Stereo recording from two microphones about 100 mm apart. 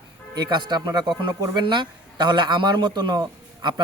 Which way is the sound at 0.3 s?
45° right (ahead or behind).